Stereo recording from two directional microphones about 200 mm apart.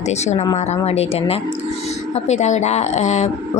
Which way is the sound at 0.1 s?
35° left (ahead or behind).